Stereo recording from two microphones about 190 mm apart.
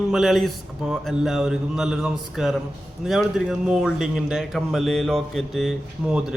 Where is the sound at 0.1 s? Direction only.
Centre (ahead or behind).